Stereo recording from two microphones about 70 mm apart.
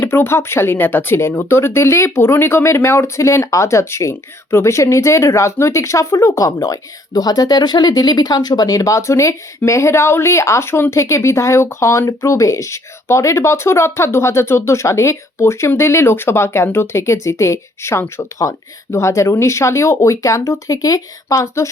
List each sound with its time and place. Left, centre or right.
0.0 s speech: left